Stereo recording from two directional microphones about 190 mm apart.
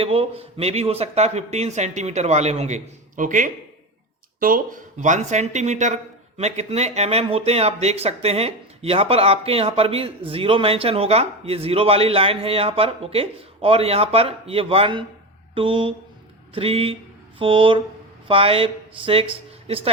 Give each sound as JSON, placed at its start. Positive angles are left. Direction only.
{"t": 0.0, "sound": "speech", "side_deg": -30}